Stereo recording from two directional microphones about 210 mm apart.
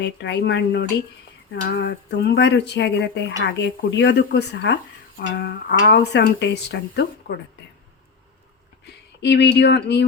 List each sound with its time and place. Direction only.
0.0 s speech: 55° left (ahead or behind)
9.2 s speech: 55° left (ahead or behind)